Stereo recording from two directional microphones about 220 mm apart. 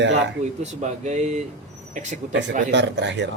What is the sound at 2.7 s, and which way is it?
Speech, 55° right (ahead or behind).